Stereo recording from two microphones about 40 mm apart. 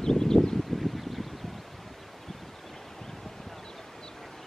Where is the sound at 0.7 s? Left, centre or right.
Centre.